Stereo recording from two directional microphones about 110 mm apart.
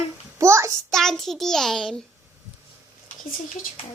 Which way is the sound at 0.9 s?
5° left (ahead or behind).